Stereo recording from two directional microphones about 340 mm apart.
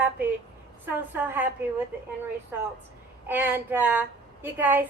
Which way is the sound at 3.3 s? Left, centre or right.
Centre.